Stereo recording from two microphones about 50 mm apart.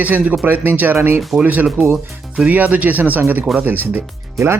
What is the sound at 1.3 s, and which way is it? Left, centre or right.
Speech, centre.